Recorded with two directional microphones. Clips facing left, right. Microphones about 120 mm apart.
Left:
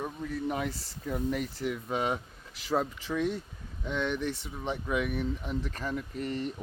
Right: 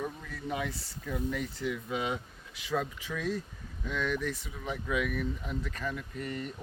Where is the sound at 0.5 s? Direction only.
30° left (ahead or behind).